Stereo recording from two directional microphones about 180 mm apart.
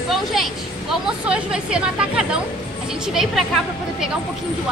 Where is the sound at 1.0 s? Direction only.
5° right (ahead or behind).